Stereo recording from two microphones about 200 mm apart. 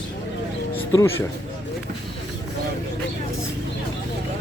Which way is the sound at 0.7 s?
15° left (ahead or behind).